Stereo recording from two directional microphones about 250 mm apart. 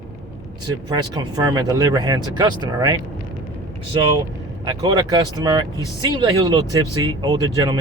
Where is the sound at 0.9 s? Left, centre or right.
Centre.